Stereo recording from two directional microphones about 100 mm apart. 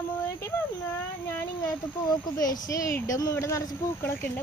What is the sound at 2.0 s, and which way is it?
Speech, 40° left (ahead or behind).